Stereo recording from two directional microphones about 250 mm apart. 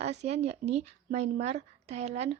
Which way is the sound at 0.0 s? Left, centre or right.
Right.